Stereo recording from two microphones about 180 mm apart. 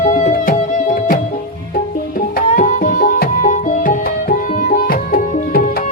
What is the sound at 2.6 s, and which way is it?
Music, 45° left (ahead or behind).